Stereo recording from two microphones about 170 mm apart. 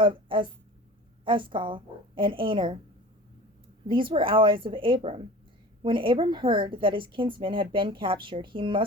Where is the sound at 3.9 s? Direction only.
30° right (ahead or behind).